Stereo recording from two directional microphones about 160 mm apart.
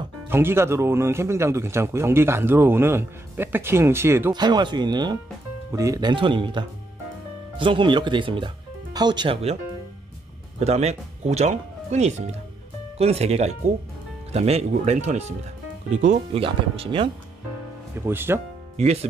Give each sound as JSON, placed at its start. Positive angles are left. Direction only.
{"t": 0.3, "sound": "speech", "side_deg": -15}
{"t": 4.3, "sound": "speech", "side_deg": -25}
{"t": 10.6, "sound": "speech", "side_deg": -40}
{"t": 16.3, "sound": "speech", "side_deg": -35}
{"t": 18.0, "sound": "speech", "side_deg": -15}
{"t": 18.8, "sound": "speech", "side_deg": -40}